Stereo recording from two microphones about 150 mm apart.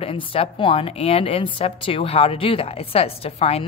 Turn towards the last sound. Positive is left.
turn(degrees=45)  # may be behind; listen again after turning